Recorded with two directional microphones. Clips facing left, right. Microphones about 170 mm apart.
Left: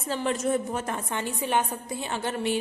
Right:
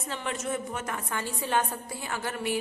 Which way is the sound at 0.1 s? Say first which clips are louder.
Left 7 dB; 35° left (ahead or behind).